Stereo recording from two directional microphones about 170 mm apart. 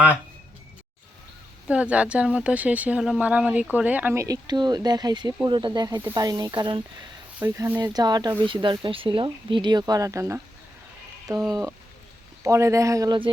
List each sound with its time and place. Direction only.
1.6 s speech: 5° right (ahead or behind); by 13.3 s 30° right (ahead or behind)